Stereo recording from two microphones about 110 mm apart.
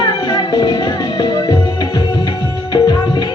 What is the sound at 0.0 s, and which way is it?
Music, 35° left (ahead or behind).